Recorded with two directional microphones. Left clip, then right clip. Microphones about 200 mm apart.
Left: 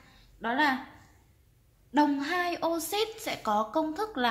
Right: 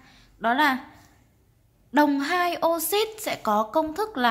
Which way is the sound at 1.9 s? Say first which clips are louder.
Right 5 dB; 30° right (ahead or behind).